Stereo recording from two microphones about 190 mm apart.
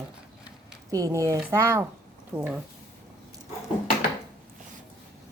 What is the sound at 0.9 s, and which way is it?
A woman's voice, 15° right (ahead or behind).